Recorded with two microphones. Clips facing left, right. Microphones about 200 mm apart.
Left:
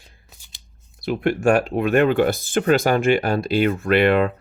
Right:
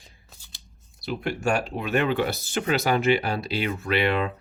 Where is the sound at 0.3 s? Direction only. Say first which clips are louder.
Left 1 dB; 15° left (ahead or behind).